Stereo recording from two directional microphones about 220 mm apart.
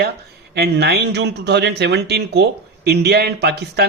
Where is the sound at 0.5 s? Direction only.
50° right (ahead or behind).